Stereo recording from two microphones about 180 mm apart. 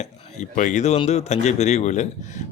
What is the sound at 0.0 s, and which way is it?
Speech, 40° left (ahead or behind).